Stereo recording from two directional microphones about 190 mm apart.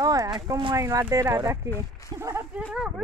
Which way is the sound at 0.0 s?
20° right (ahead or behind).